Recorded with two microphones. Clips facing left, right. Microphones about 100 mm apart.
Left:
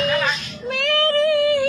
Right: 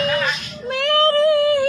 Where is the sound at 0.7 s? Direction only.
35° right (ahead or behind).